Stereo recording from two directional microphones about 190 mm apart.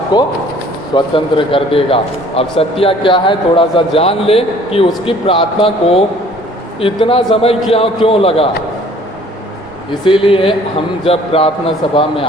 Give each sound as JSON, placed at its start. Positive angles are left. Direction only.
{"t": 0.1, "sound": "a man's voice", "side_deg": 20}
{"t": 10.0, "sound": "a man's voice", "side_deg": 25}